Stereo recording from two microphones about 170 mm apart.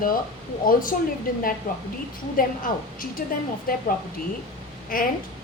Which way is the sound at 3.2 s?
55° left (ahead or behind).